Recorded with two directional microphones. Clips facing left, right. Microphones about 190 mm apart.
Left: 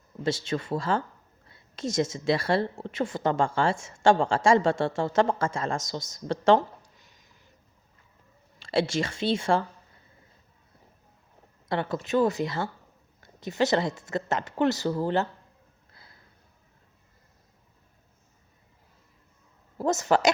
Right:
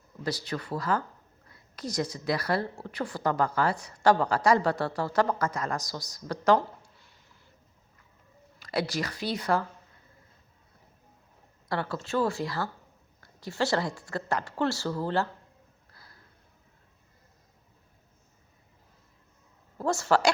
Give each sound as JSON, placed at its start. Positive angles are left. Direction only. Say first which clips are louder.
{"t": 0.2, "sound": "a woman's voice", "louder": "left 4 dB", "side_deg": 25}
{"t": 6.9, "sound": "a sound", "louder": "even", "side_deg": 15}
{"t": 8.5, "sound": "a woman's voice", "louder": "left 4 dB", "side_deg": 25}
{"t": 11.7, "sound": "a woman's voice", "louder": "left 4 dB", "side_deg": 20}
{"t": 15.9, "sound": "a sound", "louder": "left 1 dB", "side_deg": 20}
{"t": 19.8, "sound": "a woman's voice", "louder": "left 2 dB", "side_deg": 20}